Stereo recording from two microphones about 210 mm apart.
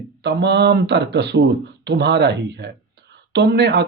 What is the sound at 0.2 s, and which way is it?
Speech, 50° right (ahead or behind).